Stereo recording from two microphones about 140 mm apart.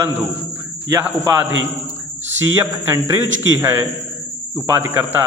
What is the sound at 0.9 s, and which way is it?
A man's voice, 15° right (ahead or behind).